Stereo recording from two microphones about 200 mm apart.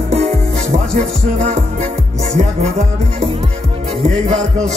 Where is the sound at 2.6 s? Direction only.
35° right (ahead or behind).